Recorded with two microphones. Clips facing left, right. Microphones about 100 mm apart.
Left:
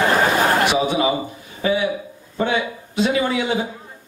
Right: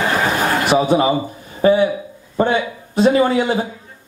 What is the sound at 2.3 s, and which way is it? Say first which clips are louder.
A man's voice: right 4 dB; 40° right (ahead or behind).